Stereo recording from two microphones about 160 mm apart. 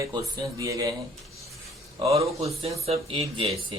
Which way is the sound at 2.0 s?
40° right (ahead or behind).